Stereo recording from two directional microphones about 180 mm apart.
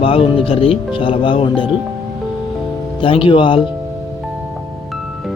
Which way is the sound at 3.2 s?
30° left (ahead or behind).